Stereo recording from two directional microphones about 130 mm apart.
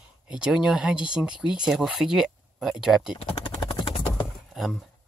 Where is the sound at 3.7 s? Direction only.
40° left (ahead or behind).